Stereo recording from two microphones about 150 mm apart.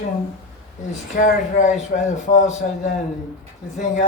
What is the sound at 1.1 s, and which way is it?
Speech, 60° left (ahead or behind).